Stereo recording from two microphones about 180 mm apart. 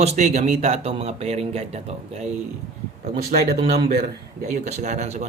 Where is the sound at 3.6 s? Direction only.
30° right (ahead or behind).